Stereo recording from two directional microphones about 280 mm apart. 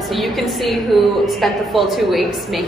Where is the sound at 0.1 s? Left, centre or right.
Centre.